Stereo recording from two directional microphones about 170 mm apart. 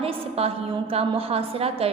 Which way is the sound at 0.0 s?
35° right (ahead or behind).